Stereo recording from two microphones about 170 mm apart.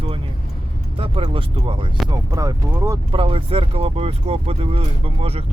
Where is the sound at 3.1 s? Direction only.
30° right (ahead or behind).